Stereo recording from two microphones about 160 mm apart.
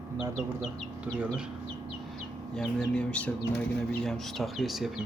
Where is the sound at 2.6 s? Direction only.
5° left (ahead or behind).